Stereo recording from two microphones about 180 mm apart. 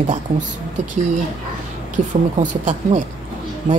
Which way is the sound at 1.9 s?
45° right (ahead or behind).